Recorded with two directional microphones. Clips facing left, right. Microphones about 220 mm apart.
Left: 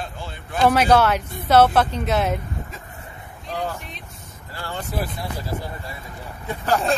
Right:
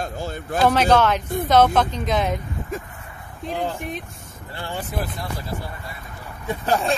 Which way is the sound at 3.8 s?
50° right (ahead or behind).